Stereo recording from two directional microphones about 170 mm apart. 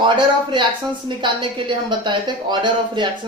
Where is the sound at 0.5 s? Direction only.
30° right (ahead or behind).